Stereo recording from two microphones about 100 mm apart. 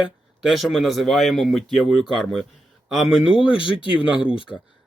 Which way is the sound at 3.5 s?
60° left (ahead or behind).